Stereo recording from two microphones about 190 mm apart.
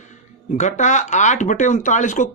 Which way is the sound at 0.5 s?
40° left (ahead or behind).